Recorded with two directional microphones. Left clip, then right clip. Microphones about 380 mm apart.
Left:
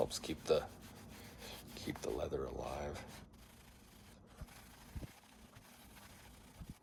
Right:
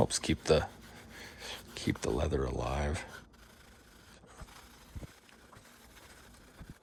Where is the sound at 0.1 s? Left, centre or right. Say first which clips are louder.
Right 7 dB; right.